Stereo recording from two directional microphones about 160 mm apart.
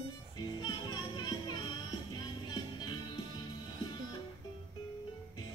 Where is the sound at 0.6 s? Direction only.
25° left (ahead or behind).